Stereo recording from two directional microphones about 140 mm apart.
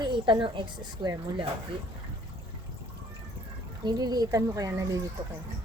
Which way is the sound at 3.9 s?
30° right (ahead or behind).